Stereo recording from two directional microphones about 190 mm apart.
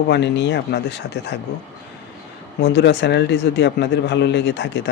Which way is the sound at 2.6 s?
60° left (ahead or behind).